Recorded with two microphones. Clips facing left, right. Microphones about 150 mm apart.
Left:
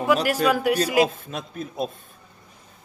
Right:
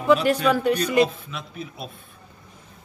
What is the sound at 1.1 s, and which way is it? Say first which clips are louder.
Speech: left 3 dB; 45° left (ahead or behind).